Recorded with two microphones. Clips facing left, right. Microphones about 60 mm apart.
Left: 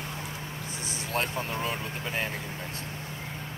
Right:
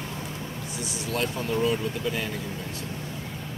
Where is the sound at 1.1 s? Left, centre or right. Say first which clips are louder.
Right 3 dB; left.